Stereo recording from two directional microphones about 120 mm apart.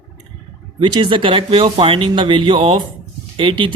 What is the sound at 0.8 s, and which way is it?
Music, 40° right (ahead or behind).